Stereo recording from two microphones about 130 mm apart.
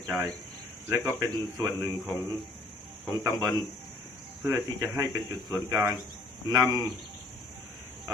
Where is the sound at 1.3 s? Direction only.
30° right (ahead or behind).